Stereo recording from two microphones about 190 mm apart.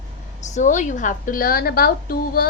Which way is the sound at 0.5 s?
40° left (ahead or behind).